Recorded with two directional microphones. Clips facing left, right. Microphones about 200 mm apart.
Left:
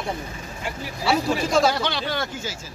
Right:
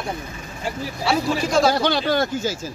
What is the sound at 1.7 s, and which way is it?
Speech, 40° right (ahead or behind).